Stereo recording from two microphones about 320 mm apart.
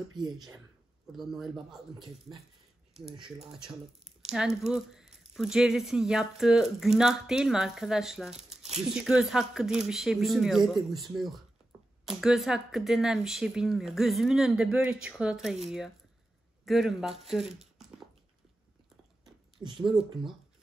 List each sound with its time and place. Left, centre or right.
0.1 s speech: centre
1.1 s speech: centre
2.0 s speech: centre
4.3 s speech: centre
17.3 s a sound: centre
19.8 s speech: centre